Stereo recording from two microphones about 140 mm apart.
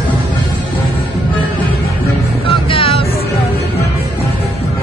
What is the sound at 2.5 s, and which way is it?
Music, 40° left (ahead or behind).